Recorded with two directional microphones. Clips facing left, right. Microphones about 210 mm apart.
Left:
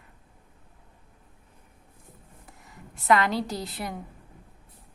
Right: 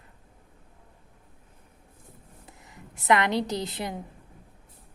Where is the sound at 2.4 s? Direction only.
20° right (ahead or behind).